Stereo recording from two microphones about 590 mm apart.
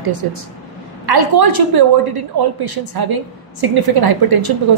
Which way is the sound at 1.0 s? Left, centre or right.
Right.